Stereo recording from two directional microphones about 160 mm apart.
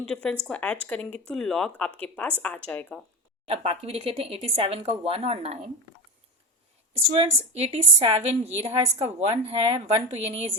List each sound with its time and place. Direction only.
0.0 s speech: 5° left (ahead or behind)
3.4 s speech: 35° right (ahead or behind)
7.1 s speech: 40° right (ahead or behind)